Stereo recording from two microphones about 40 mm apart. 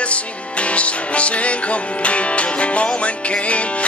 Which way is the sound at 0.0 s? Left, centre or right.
Left.